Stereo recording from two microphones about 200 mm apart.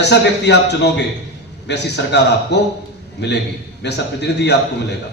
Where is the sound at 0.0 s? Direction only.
60° left (ahead or behind).